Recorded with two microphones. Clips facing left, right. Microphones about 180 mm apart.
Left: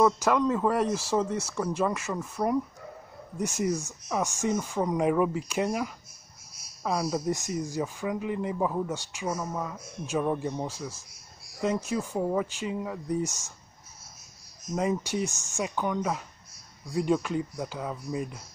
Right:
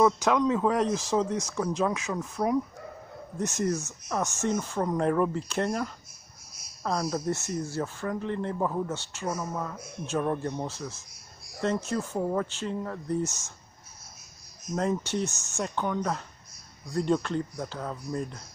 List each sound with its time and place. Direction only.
0.0 s speech: 5° left (ahead or behind)
14.8 s speech: 10° left (ahead or behind)